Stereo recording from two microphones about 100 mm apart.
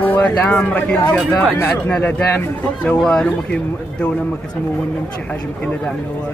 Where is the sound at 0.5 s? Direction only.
15° left (ahead or behind).